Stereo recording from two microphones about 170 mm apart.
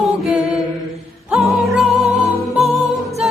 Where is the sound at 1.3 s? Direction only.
10° right (ahead or behind).